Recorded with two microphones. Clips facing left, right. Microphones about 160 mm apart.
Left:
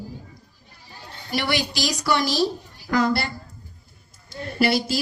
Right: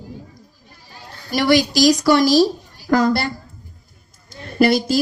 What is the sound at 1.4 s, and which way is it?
Speech, 40° right (ahead or behind).